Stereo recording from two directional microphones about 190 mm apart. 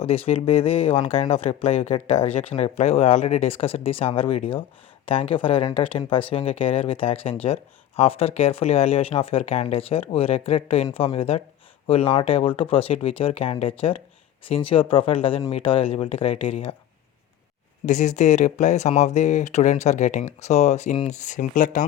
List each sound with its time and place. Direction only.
0.3 s speech: 30° left (ahead or behind)
17.8 s speech: 40° left (ahead or behind)